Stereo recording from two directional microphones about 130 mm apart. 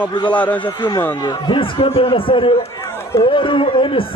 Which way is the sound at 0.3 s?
10° left (ahead or behind).